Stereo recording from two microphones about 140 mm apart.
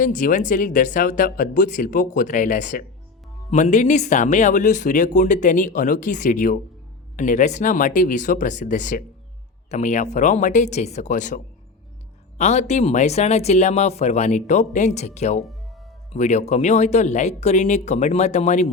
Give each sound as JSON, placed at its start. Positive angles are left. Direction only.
{"t": 0.0, "sound": "speech", "side_deg": 65}
{"t": 9.6, "sound": "speech", "side_deg": 55}
{"t": 15.4, "sound": "music", "side_deg": 0}
{"t": 16.1, "sound": "speech", "side_deg": 55}